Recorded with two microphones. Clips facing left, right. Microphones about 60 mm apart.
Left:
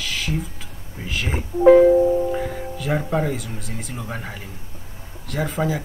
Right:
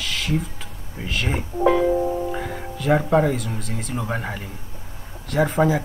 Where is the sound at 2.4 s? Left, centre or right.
Centre.